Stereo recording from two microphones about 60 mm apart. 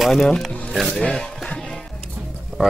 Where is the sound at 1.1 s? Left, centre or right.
Centre.